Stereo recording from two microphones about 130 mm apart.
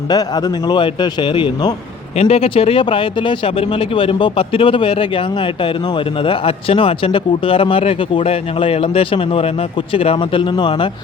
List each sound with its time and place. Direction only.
0.1 s a man's voice: 30° left (ahead or behind)